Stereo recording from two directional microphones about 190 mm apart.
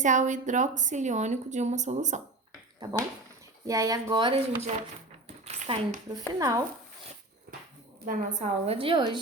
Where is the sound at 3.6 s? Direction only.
15° right (ahead or behind).